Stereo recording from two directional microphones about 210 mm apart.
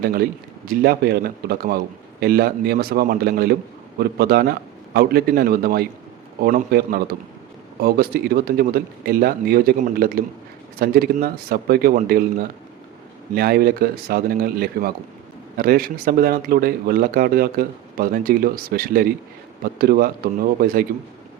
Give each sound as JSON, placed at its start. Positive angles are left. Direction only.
{"t": 0.0, "sound": "speech", "side_deg": -45}